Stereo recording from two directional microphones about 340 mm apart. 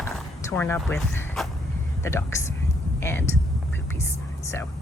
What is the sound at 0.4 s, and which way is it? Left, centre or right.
A woman's voice, centre.